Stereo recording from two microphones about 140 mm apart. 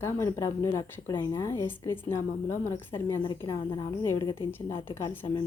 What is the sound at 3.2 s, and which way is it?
Speech, 30° left (ahead or behind).